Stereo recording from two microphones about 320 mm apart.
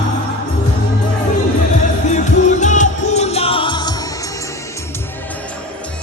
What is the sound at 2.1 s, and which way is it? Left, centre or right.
Music, left.